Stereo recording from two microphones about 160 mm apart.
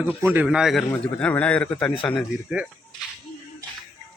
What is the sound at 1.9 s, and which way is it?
Speech, 30° left (ahead or behind).